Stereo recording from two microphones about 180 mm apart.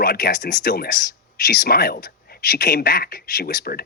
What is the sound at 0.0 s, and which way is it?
Speech, 55° left (ahead or behind).